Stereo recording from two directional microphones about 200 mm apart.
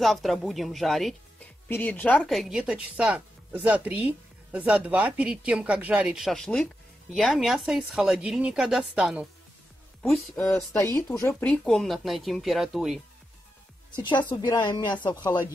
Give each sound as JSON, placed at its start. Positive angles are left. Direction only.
{"t": 0.0, "sound": "speech", "side_deg": 0}
{"t": 10.0, "sound": "speech", "side_deg": 5}
{"t": 13.9, "sound": "a woman's voice", "side_deg": 20}